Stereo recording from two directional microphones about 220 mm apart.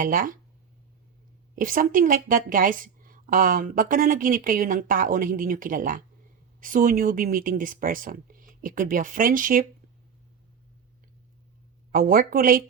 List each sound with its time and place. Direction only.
0.0 s a woman's voice: 40° right (ahead or behind)
1.5 s a woman's voice: 40° right (ahead or behind)
11.9 s a woman's voice: 40° right (ahead or behind)